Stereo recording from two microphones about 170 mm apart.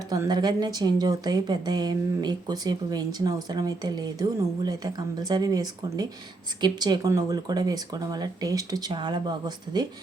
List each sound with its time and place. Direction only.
0.1 s a woman's voice: 25° right (ahead or behind)